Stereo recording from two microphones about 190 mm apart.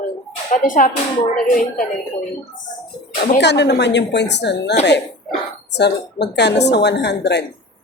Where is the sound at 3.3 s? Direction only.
65° left (ahead or behind).